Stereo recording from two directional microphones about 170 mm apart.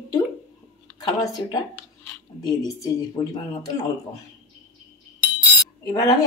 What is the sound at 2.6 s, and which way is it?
Speech, 20° left (ahead or behind).